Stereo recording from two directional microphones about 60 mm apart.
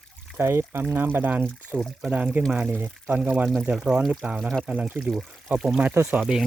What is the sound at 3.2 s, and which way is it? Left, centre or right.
Speech, right.